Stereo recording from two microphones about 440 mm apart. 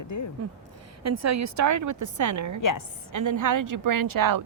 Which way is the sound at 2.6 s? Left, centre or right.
Left.